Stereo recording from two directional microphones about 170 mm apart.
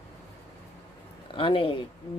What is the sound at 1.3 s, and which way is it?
Speech, 30° left (ahead or behind).